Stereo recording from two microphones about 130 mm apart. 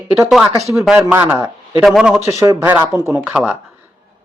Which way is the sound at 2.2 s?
25° right (ahead or behind).